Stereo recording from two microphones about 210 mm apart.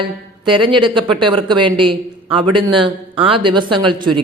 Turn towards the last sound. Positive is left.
turn(degrees=-20)  # may be behind; listen again after turning